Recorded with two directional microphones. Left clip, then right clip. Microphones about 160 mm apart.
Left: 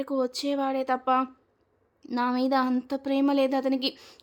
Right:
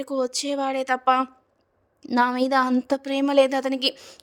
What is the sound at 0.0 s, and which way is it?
A woman's voice, 40° right (ahead or behind).